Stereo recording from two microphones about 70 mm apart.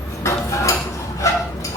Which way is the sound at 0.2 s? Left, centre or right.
Left.